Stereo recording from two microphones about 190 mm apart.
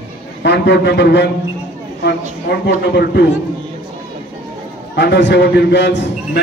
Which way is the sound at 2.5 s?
60° left (ahead or behind).